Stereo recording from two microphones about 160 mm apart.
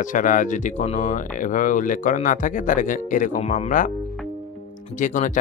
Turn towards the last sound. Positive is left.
turn(degrees=55)  # may be behind; listen again after turning